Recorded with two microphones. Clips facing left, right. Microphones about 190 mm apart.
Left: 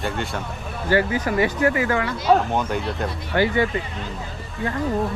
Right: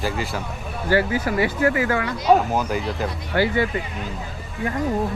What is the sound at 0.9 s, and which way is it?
Speech, 20° left (ahead or behind).